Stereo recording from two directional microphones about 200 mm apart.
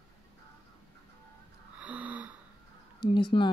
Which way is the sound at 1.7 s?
5° right (ahead or behind).